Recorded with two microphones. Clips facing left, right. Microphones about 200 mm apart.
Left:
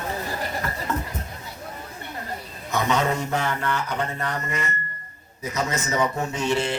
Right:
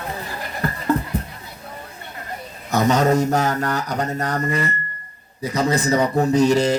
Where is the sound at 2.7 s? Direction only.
40° right (ahead or behind).